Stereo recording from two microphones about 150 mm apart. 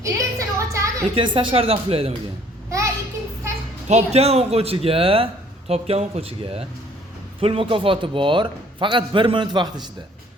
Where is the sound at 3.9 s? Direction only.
45° right (ahead or behind).